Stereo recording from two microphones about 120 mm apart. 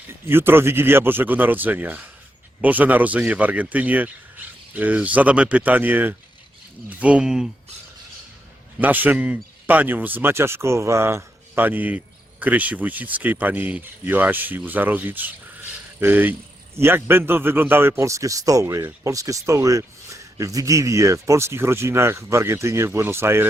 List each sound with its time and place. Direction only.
0.3 s a man's voice: 20° right (ahead or behind)
8.8 s a man's voice: 15° right (ahead or behind)